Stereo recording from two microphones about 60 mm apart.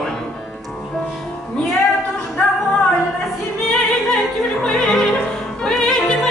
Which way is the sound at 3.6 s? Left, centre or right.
Centre.